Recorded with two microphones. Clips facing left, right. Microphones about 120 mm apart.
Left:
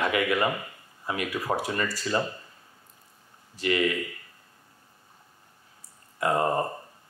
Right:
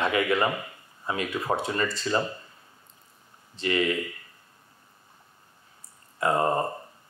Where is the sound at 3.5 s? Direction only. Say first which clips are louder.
Even; 30° right (ahead or behind).